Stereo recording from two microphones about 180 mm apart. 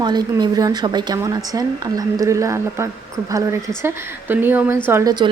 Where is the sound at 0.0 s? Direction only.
25° right (ahead or behind).